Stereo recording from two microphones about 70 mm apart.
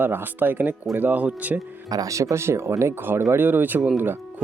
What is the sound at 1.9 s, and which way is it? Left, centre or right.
Speech, right.